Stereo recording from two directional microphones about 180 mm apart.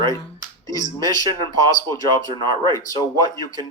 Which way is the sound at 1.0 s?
20° left (ahead or behind).